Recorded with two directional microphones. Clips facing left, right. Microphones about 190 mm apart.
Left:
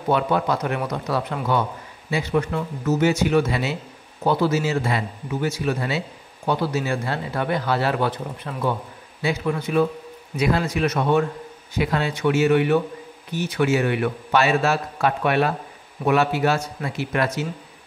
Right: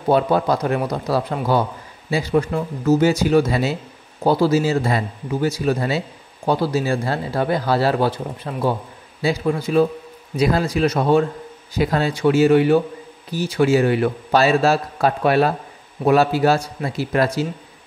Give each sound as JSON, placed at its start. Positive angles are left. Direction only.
{"t": 0.1, "sound": "a man's voice", "side_deg": -35}